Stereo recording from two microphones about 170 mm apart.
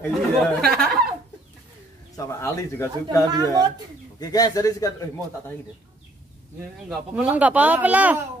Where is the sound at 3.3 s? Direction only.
25° right (ahead or behind).